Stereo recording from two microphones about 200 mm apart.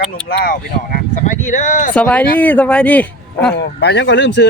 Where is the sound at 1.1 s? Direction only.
40° left (ahead or behind).